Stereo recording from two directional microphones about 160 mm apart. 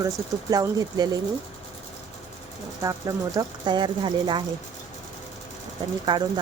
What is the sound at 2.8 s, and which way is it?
Speech, 20° right (ahead or behind).